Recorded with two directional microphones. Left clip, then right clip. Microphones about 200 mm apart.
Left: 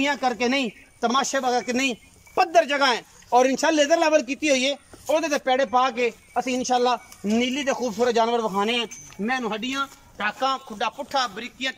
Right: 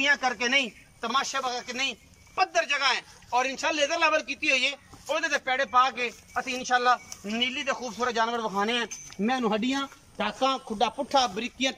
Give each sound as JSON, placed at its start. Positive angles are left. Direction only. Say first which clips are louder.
{"t": 0.0, "sound": "speech", "louder": "left 2 dB", "side_deg": 20}
{"t": 9.2, "sound": "speech", "louder": "left 1 dB", "side_deg": 0}
{"t": 9.7, "sound": "speech", "louder": "left 3 dB", "side_deg": -15}